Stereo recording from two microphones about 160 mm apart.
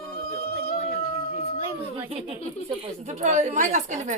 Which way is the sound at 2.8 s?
45° right (ahead or behind).